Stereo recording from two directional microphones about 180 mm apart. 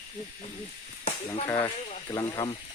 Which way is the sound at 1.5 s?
15° left (ahead or behind).